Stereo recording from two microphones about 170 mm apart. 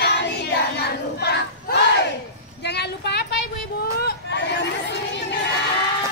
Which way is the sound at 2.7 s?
75° left (ahead or behind).